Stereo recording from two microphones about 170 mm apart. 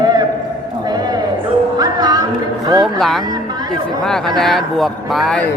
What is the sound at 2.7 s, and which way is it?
Speech, 25° right (ahead or behind).